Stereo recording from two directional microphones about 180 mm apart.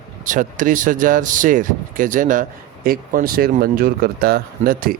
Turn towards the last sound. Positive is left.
turn(degrees=-55)  # may be behind; listen again after turning